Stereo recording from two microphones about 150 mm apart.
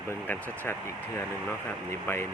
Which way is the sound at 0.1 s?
10° left (ahead or behind).